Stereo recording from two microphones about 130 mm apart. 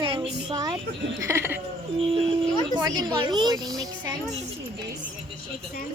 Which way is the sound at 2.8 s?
30° right (ahead or behind).